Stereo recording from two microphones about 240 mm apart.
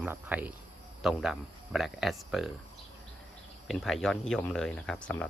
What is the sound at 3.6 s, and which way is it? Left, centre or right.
Speech, centre.